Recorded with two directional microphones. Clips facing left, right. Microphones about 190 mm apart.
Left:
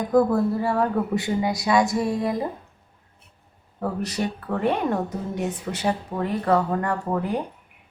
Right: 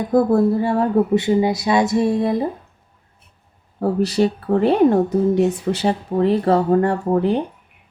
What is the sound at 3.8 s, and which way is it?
Speech, 30° right (ahead or behind).